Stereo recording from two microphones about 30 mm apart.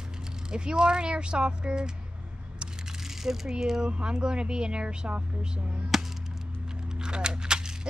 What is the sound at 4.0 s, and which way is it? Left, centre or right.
Speech, right.